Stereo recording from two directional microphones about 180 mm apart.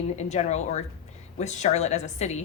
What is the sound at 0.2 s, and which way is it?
A woman's voice, 40° left (ahead or behind).